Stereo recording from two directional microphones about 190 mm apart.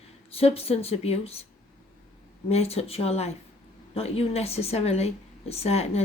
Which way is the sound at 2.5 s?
35° left (ahead or behind).